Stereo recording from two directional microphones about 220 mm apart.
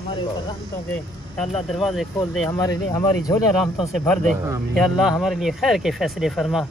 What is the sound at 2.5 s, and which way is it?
Speech, 15° left (ahead or behind).